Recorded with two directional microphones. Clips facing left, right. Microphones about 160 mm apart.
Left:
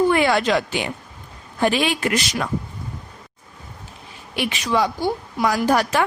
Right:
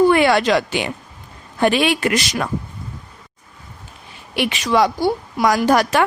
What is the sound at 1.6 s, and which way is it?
Speech, 65° right (ahead or behind).